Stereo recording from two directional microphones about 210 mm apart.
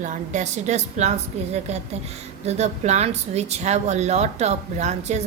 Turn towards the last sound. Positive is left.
turn(degrees=-35)  # may be behind; listen again after turning